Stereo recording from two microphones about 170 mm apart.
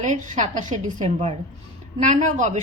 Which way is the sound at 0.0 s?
45° right (ahead or behind).